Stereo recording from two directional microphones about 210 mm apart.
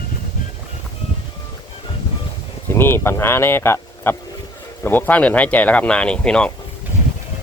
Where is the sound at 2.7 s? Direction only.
10° left (ahead or behind).